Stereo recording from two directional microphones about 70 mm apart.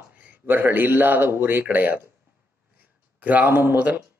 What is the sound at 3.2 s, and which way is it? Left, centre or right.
Speech, right.